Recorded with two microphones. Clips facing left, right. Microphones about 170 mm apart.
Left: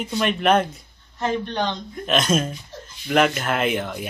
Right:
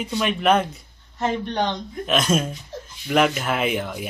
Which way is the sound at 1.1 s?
20° right (ahead or behind).